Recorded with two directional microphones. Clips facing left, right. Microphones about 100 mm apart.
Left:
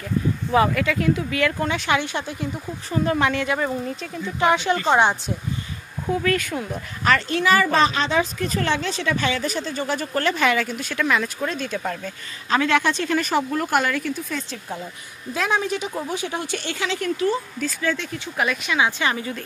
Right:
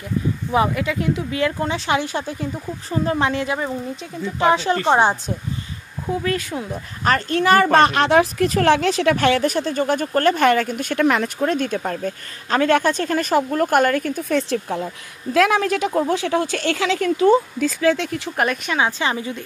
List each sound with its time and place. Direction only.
0.5 s speech: 20° right (ahead or behind)
3.5 s speech: 15° right (ahead or behind)
4.4 s speech: 30° right (ahead or behind)
6.5 s speech: 10° right (ahead or behind)
7.1 s a woman's voice: 45° right (ahead or behind)
11.8 s a woman's voice: 45° right (ahead or behind)
14.5 s speech: 75° right (ahead or behind)
15.3 s speech: 90° right
18.3 s speech: 45° right (ahead or behind); by 19.4 s 25° right (ahead or behind)